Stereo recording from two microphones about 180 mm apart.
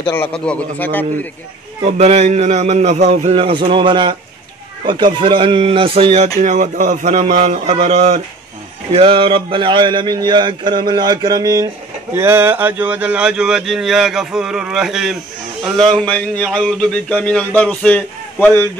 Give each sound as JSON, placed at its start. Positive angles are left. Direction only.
{"t": 0.5, "sound": "speech", "side_deg": 5}
{"t": 1.8, "sound": "a man's voice", "side_deg": -35}
{"t": 6.4, "sound": "a man's voice", "side_deg": -45}